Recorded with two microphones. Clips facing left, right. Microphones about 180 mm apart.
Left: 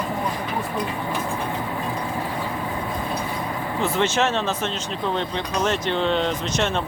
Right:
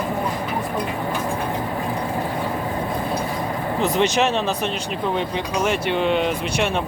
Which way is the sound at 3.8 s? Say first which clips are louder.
Right 2 dB; 15° right (ahead or behind).